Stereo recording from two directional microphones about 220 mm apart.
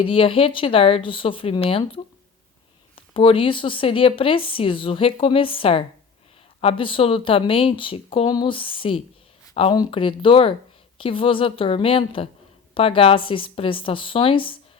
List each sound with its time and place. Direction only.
0.0 s speech: 25° left (ahead or behind)